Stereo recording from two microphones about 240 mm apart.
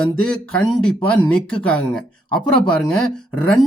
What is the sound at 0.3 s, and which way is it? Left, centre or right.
Speech, centre.